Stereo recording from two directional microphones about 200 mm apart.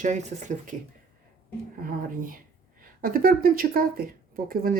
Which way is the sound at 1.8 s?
45° right (ahead or behind).